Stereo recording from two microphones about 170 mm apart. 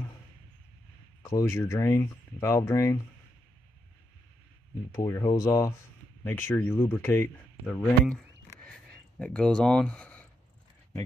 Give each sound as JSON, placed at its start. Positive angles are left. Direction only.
{"t": 1.2, "sound": "speech", "side_deg": 20}
{"t": 4.9, "sound": "speech", "side_deg": 20}
{"t": 8.5, "sound": "a sound", "side_deg": 5}